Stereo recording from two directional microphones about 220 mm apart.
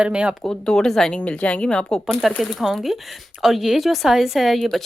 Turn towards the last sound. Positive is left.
turn(degrees=0)  # may be behind; listen again after turning